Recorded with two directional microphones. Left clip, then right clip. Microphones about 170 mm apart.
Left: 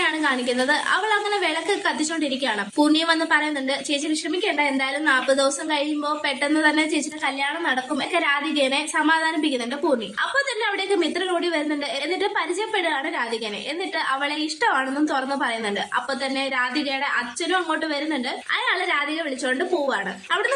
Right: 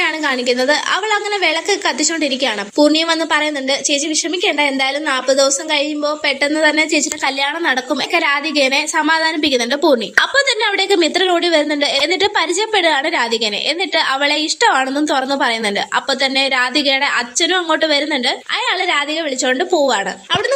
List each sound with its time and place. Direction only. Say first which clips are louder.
0.0 s a woman's voice: right 5 dB; 25° right (ahead or behind)